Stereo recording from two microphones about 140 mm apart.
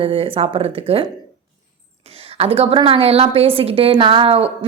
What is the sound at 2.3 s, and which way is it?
A woman's voice, 45° right (ahead or behind).